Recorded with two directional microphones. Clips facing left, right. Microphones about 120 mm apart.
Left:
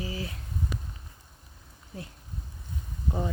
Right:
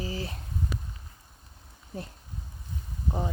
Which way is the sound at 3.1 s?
20° right (ahead or behind).